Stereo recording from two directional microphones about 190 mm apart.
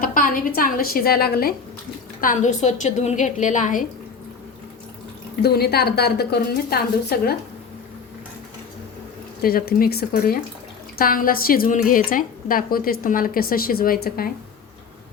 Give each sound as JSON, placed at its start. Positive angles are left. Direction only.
{"t": 0.0, "sound": "a woman's voice", "side_deg": 45}
{"t": 2.2, "sound": "a woman's voice", "side_deg": 40}
{"t": 5.4, "sound": "a woman's voice", "side_deg": 55}
{"t": 9.4, "sound": "a woman's voice", "side_deg": 50}